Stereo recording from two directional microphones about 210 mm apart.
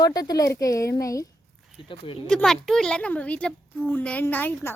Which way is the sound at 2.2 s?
Centre (ahead or behind).